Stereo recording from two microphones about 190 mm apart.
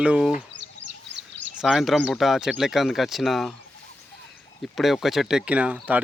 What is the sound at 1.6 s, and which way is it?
Speech, centre (ahead or behind).